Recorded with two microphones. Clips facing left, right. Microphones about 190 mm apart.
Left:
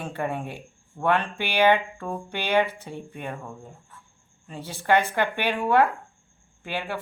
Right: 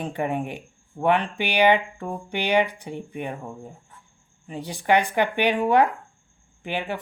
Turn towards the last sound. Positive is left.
turn(degrees=-15)  # may be behind; listen again after turning